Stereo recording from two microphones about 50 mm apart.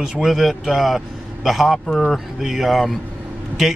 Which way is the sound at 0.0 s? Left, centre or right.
Centre.